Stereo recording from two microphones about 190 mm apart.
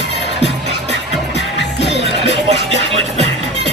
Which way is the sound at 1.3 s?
65° left (ahead or behind).